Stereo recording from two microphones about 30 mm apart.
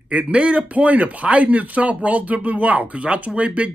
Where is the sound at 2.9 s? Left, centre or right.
Right.